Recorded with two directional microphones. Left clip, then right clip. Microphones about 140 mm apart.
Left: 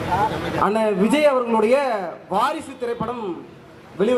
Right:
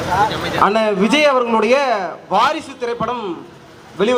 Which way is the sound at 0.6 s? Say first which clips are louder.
Right 5 dB; 20° right (ahead or behind).